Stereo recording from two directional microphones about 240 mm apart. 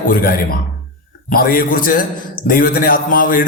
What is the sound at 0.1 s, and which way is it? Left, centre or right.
A man's voice, left.